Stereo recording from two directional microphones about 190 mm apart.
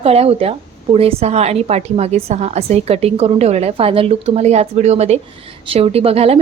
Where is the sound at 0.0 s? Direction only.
30° right (ahead or behind).